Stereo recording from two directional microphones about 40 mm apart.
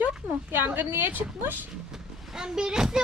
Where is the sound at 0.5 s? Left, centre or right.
Right.